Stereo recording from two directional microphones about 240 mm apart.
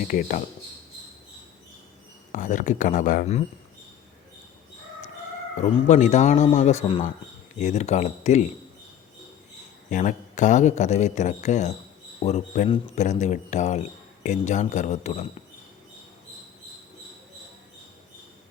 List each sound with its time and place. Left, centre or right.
0.1 s a man's voice: left
2.3 s a man's voice: left
5.5 s speech: left
9.9 s a man's voice: left